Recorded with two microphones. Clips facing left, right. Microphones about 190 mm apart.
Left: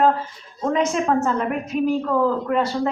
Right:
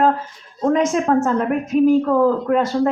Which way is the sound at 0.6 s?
50° right (ahead or behind).